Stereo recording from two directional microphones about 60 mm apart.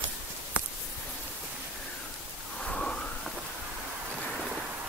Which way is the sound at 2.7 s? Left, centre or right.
Centre.